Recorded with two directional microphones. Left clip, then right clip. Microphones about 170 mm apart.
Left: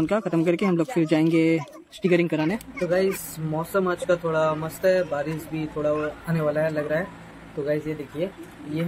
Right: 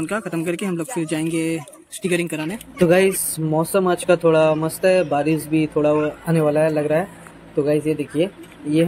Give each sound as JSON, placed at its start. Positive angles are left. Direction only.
{"t": 0.0, "sound": "speech", "side_deg": 15}
{"t": 2.8, "sound": "speech", "side_deg": -45}
{"t": 3.5, "sound": "speech", "side_deg": -35}